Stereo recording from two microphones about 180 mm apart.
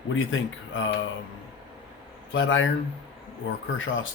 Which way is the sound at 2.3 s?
90° left.